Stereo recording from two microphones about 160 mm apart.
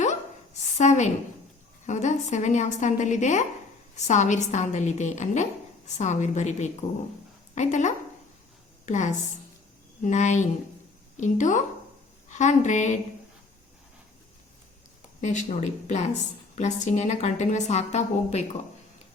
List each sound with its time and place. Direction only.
0.8 s a woman's voice: 45° left (ahead or behind)
15.2 s a woman's voice: 45° left (ahead or behind)